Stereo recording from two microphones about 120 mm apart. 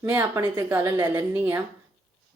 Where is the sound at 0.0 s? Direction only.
25° right (ahead or behind).